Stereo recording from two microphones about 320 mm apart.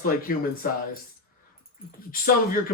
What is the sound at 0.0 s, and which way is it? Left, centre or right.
Speech, left.